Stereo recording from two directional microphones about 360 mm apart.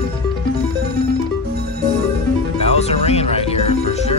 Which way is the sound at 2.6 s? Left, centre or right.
Centre.